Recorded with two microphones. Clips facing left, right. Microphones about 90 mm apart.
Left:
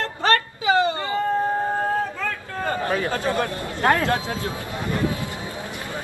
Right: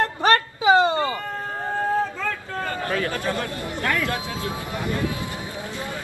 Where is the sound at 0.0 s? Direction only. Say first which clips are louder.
Right 2 dB; 20° right (ahead or behind).